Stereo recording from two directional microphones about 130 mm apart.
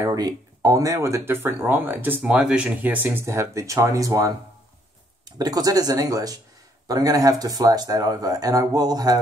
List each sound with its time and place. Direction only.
0.0 s speech: 25° right (ahead or behind)
5.4 s speech: 30° right (ahead or behind)